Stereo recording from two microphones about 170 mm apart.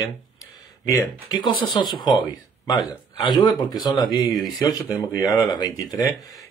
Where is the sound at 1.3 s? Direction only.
25° left (ahead or behind).